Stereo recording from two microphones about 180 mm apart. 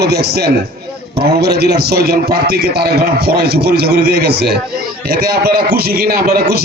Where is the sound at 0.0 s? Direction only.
65° right (ahead or behind).